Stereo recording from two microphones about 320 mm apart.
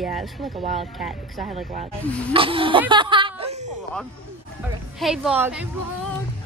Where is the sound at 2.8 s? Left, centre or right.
Centre.